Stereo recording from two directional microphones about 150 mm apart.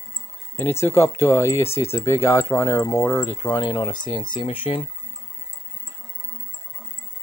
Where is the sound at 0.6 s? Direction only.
15° left (ahead or behind).